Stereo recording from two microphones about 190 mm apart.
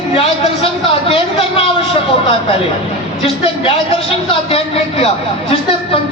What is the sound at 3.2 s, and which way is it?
A man's voice, 30° left (ahead or behind).